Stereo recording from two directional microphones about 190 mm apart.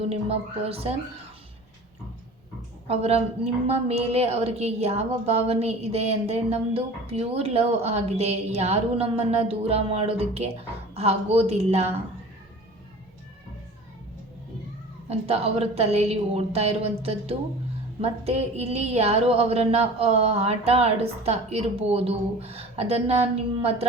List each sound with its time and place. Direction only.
0.0 s a woman's voice: 30° right (ahead or behind)
2.8 s a woman's voice: 35° right (ahead or behind)
15.1 s a woman's voice: 30° right (ahead or behind)